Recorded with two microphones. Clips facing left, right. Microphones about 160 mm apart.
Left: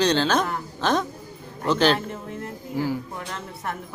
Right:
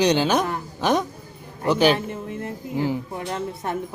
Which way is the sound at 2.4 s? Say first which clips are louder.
Right 2 dB; 20° right (ahead or behind).